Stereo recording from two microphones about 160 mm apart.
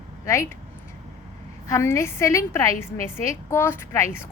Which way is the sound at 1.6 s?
20° left (ahead or behind).